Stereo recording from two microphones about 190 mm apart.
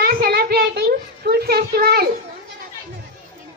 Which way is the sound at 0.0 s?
50° right (ahead or behind).